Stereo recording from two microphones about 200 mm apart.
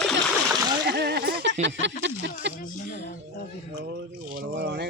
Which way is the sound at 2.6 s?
40° left (ahead or behind).